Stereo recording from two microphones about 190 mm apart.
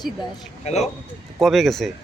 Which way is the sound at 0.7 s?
35° left (ahead or behind).